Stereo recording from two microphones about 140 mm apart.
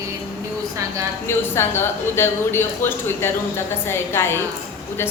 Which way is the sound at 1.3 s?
15° left (ahead or behind).